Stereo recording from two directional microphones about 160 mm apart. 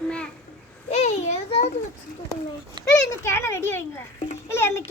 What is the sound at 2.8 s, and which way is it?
Children playing, 30° right (ahead or behind).